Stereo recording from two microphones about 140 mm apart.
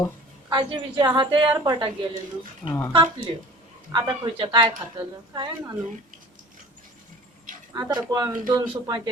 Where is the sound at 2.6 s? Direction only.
15° left (ahead or behind).